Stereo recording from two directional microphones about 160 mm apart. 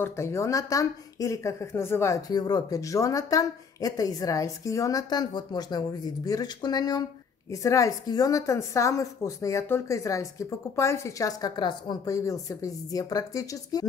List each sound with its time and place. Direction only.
0.0 s speech: 20° left (ahead or behind)